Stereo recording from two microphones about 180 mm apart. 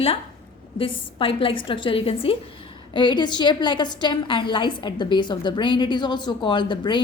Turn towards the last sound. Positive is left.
turn(degrees=25)  # may be behind; listen again after turning